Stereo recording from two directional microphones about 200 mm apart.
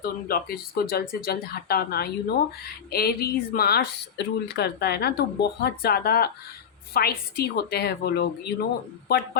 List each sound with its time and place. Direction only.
0.0 s speech: 50° left (ahead or behind)